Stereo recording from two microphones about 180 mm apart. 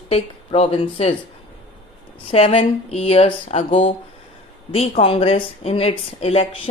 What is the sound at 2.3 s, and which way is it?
Speech, 35° left (ahead or behind).